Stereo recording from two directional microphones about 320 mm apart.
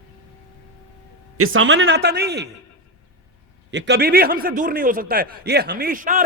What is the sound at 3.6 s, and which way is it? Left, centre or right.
A man's voice, right.